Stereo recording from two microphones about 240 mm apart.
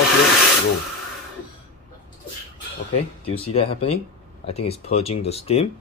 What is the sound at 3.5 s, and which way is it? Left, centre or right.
Speech, left.